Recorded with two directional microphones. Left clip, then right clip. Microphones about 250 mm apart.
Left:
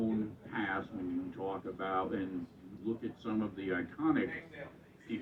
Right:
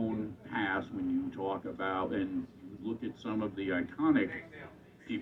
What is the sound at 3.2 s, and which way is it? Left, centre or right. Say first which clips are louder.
A man's voice: right 3 dB; right.